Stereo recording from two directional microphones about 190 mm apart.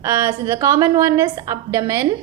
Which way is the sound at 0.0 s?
15° right (ahead or behind).